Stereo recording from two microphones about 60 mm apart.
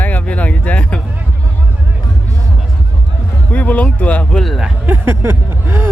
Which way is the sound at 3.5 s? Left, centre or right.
Left.